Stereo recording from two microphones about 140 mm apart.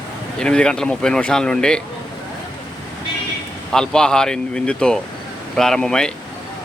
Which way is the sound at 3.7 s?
5° left (ahead or behind).